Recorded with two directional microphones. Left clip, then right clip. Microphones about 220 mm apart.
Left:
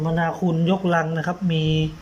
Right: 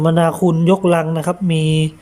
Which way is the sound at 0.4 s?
20° right (ahead or behind).